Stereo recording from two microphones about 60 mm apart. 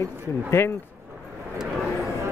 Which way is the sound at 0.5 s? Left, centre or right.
Left.